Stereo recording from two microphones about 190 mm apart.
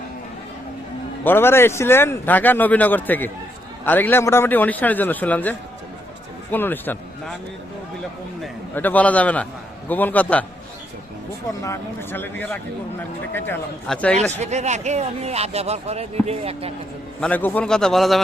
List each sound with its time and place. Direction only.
1.2 s speech: 10° left (ahead or behind)
8.4 s speech: 10° left (ahead or behind)
11.6 s a man's voice: 15° left (ahead or behind)
14.3 s speech: 35° right (ahead or behind)
17.2 s a man's voice: 5° left (ahead or behind)